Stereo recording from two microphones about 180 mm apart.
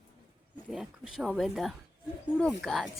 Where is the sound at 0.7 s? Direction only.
Centre (ahead or behind).